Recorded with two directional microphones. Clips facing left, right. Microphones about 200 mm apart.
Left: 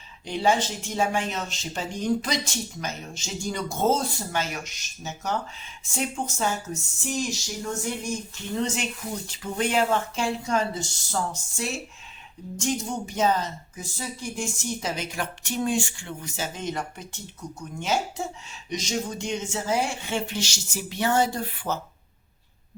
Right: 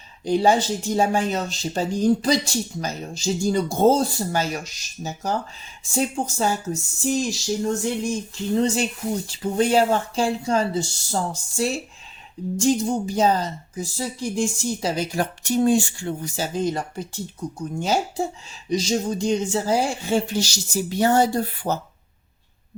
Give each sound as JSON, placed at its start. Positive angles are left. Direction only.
{"t": 0.3, "sound": "speech", "side_deg": -35}